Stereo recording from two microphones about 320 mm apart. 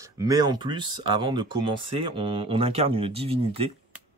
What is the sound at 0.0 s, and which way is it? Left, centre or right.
Speech, centre.